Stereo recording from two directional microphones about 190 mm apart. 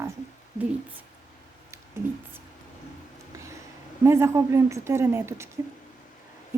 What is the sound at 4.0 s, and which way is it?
A woman's voice, 15° right (ahead or behind).